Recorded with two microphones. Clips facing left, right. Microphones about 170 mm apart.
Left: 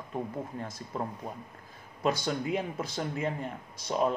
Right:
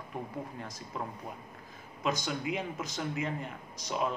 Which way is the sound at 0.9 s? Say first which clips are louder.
Left 4 dB; 40° left (ahead or behind).